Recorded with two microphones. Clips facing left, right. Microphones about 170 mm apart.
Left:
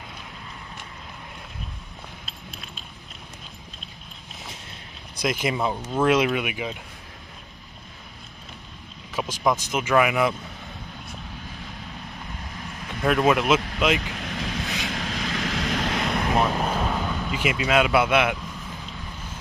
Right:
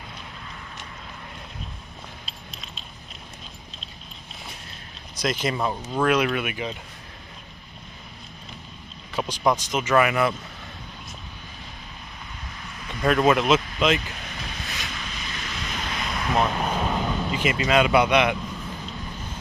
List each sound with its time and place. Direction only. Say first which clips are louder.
5.2 s speech: left 1 dB; 10° left (ahead or behind)
6.0 s speech: left 1 dB; 20° left (ahead or behind)
9.2 s speech: right 1 dB; 5° left (ahead or behind)
12.9 s speech: right 1 dB; 5° left (ahead or behind)
14.0 s waves: left 5 dB; 90° left; by 16.3 s 60° left (ahead or behind)
16.4 s speech: even; 10° left (ahead or behind)